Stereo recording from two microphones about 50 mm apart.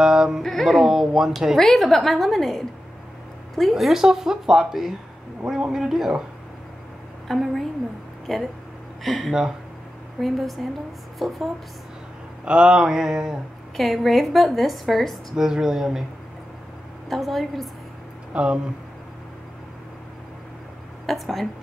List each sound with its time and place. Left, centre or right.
0.0 s a sound: centre
0.4 s speech: centre
0.7 s a woman's voice: centre
1.6 s a woman's voice: centre
7.2 s a woman's voice: centre
12.4 s a woman's voice: centre
13.7 s a woman's voice: centre
15.3 s a woman's voice: centre
17.1 s a woman's voice: centre
18.3 s speech: right
21.1 s a woman's voice: centre